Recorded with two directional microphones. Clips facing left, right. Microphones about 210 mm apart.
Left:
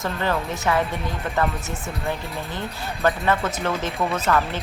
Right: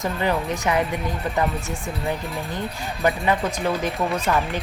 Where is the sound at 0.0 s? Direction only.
15° right (ahead or behind).